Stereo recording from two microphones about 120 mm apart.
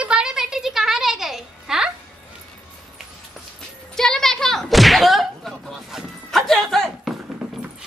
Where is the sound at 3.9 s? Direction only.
5° left (ahead or behind).